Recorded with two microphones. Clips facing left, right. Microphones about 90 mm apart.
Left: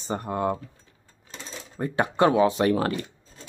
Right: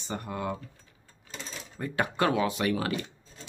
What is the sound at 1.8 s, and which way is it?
Speech, 25° left (ahead or behind).